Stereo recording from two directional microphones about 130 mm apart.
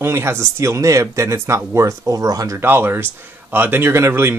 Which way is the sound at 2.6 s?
15° right (ahead or behind).